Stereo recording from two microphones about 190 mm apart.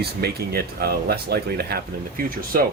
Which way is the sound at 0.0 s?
55° right (ahead or behind).